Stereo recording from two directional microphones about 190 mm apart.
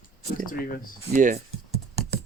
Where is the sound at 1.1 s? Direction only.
45° right (ahead or behind).